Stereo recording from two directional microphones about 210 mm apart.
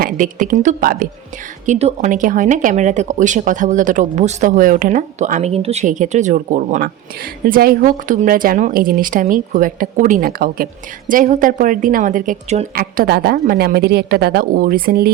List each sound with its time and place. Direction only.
0.0 s speech: 40° right (ahead or behind)
12.7 s a woman's voice: 45° right (ahead or behind)